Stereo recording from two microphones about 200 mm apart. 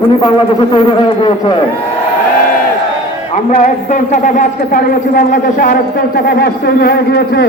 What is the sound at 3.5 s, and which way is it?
A man's voice, 35° left (ahead or behind).